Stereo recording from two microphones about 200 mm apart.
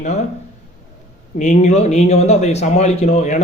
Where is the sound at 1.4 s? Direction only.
35° left (ahead or behind).